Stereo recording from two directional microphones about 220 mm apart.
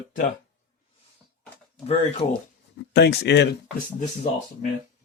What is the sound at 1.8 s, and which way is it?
Speech, 25° left (ahead or behind).